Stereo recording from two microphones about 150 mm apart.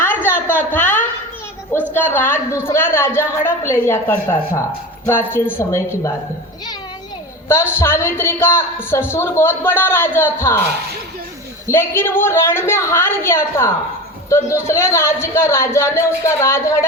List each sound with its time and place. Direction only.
0.0 s a sound: 15° left (ahead or behind)
1.9 s a woman's voice: 15° left (ahead or behind)
7.4 s a woman's voice: 15° left (ahead or behind)
11.7 s a woman's voice: 15° left (ahead or behind)